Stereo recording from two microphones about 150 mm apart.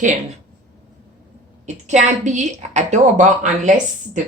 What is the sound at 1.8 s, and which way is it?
A woman's voice, 50° right (ahead or behind).